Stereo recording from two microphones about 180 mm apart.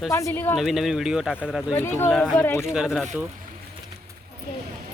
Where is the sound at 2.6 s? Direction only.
5° right (ahead or behind).